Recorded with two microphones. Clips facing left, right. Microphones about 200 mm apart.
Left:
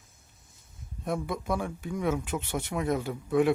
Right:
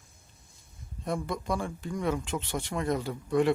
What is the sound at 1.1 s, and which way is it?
Speech, 5° left (ahead or behind).